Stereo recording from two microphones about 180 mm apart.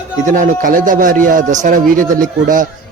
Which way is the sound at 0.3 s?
45° right (ahead or behind).